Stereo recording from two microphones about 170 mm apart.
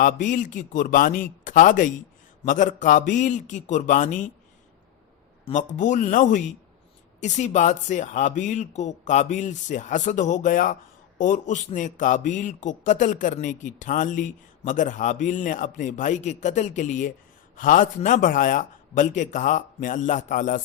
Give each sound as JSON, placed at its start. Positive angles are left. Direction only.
{"t": 0.0, "sound": "a man's voice", "side_deg": 50}
{"t": 5.5, "sound": "a man's voice", "side_deg": 45}